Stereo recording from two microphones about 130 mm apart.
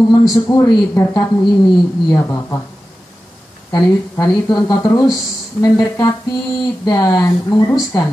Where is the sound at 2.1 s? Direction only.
20° left (ahead or behind).